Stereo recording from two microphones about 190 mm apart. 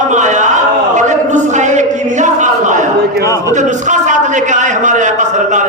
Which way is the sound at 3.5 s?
40° right (ahead or behind).